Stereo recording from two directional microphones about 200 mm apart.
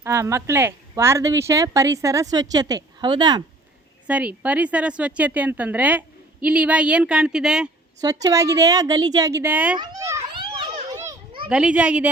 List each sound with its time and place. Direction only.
0.0 s a woman's voice: 15° right (ahead or behind)
4.0 s a woman's voice: 5° right (ahead or behind)
8.0 s a woman's voice: 15° right (ahead or behind)
9.7 s children playing: 20° right (ahead or behind)
11.4 s a child's voice: 5° right (ahead or behind)